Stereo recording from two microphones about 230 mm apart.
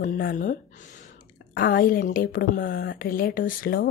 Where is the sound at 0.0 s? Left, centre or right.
Left.